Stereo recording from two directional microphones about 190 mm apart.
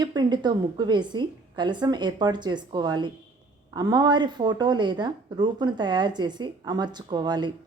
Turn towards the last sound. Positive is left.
turn(degrees=-25)  # may be behind; listen again after turning